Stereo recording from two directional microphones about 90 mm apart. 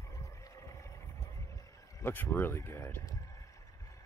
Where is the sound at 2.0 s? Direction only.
25° left (ahead or behind).